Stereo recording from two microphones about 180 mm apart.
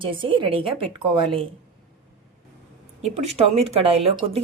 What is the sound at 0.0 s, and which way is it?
A woman's voice, 30° right (ahead or behind).